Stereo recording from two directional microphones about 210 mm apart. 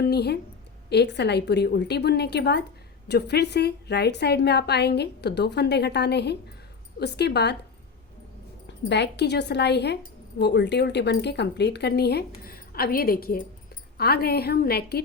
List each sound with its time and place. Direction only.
0.0 s a woman's voice: 50° left (ahead or behind)
8.6 s a woman's voice: 55° left (ahead or behind)